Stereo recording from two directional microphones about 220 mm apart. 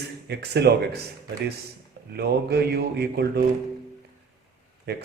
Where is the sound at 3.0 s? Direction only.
45° right (ahead or behind).